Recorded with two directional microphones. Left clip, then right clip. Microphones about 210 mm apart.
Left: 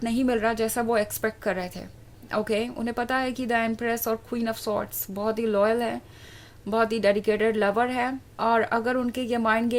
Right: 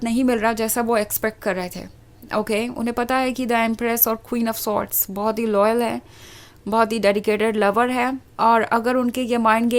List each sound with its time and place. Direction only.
0.0 s a woman's voice: 25° right (ahead or behind)